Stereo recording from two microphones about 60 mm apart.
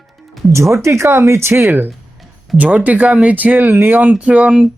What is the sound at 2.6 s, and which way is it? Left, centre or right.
Speech, right.